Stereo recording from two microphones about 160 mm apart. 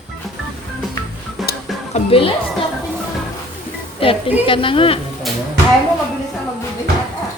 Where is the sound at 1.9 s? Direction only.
35° left (ahead or behind).